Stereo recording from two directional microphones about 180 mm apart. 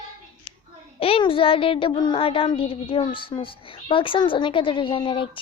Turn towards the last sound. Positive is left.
turn(degrees=30)  # may be behind; listen again after turning